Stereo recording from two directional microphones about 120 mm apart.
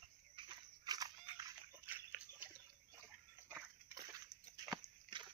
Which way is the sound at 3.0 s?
15° right (ahead or behind).